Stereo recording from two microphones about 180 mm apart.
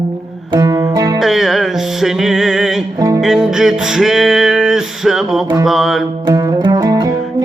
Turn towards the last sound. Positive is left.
turn(degrees=-20)  # may be behind; listen again after turning